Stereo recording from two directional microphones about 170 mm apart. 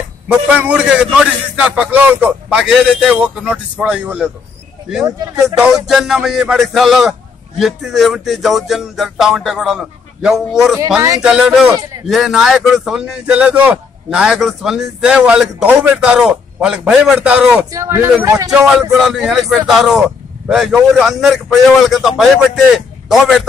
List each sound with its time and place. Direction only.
0.3 s speech: 5° right (ahead or behind)
5.0 s speech: 25° right (ahead or behind)
5.9 s a man's voice: centre (ahead or behind)
17.6 s speech: 20° right (ahead or behind)
18.5 s a man's voice: centre (ahead or behind)